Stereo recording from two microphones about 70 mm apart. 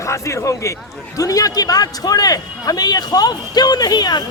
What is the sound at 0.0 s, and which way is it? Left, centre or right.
A man's voice, left.